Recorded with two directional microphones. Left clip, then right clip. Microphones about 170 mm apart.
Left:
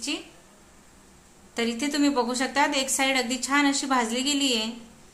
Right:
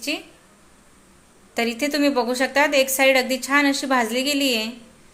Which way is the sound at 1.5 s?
15° right (ahead or behind).